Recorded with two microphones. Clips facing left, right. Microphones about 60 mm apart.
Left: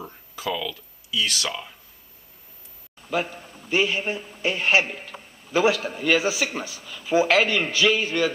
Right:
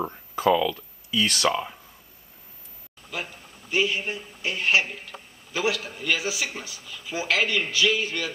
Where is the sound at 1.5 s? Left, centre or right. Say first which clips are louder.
Right 7 dB; right.